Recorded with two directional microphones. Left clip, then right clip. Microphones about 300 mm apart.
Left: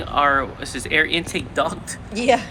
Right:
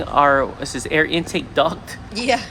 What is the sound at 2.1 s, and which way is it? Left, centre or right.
Speech, centre.